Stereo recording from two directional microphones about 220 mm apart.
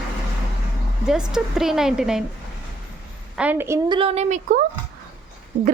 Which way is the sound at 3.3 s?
5° right (ahead or behind).